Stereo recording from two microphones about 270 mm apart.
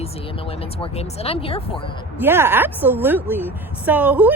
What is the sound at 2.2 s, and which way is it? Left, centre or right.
A woman's voice, centre.